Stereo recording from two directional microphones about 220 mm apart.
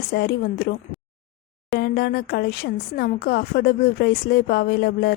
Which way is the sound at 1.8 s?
45° left (ahead or behind).